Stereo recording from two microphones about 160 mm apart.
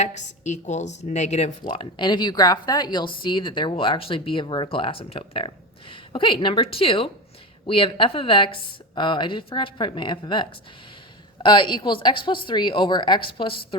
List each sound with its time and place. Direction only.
0.0 s a woman's voice: 45° left (ahead or behind)
1.6 s a woman's voice: 30° left (ahead or behind)
11.4 s a woman's voice: 30° left (ahead or behind)